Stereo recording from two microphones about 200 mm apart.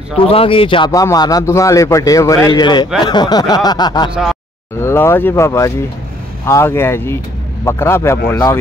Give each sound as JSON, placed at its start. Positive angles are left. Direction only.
{"t": 0.2, "sound": "a man's voice", "side_deg": 25}
{"t": 4.1, "sound": "speech", "side_deg": 0}
{"t": 4.7, "sound": "speech", "side_deg": 10}